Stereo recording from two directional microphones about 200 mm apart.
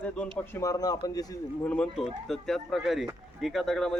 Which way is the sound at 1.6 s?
5° left (ahead or behind).